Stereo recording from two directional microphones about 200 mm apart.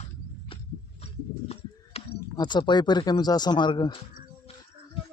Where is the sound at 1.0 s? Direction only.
30° left (ahead or behind).